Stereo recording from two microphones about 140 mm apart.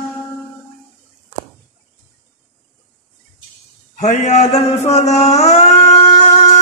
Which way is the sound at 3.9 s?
55° left (ahead or behind).